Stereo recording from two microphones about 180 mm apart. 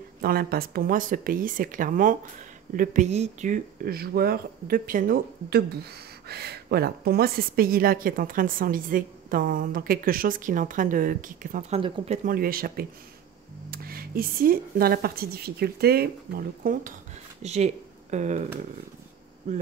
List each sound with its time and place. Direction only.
0.2 s speech: 55° right (ahead or behind)
17.4 s speech: 40° right (ahead or behind)